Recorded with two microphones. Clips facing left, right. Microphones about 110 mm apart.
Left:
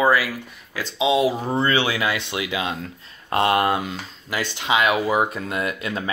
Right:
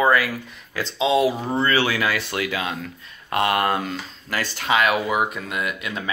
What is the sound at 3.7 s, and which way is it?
Speech, 15° left (ahead or behind).